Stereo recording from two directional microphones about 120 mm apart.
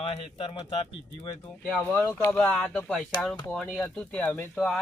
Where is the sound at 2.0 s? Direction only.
25° left (ahead or behind).